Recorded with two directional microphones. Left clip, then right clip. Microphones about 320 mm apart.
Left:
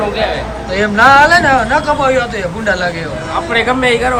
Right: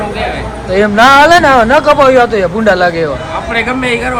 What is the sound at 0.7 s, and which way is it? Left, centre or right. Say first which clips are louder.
Speech: right 2 dB; centre.